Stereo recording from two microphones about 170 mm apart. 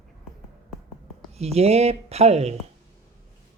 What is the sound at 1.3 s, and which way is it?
A woman's voice, 40° right (ahead or behind).